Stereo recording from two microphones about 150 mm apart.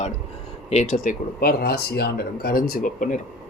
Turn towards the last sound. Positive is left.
turn(degrees=70)  # may be behind; listen again after turning